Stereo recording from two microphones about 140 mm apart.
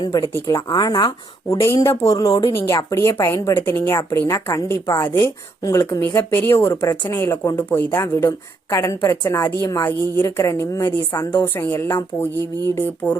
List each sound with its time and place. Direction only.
0.0 s a woman's voice: 30° left (ahead or behind)